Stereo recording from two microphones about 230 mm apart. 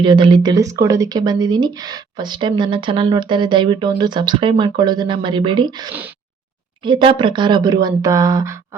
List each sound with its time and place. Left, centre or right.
0.0 s speech: centre